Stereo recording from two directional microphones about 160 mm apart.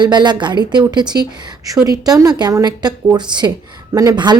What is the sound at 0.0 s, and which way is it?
Speech, 30° right (ahead or behind).